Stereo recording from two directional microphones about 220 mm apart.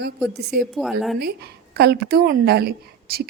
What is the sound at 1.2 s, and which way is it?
A woman's voice, 45° right (ahead or behind).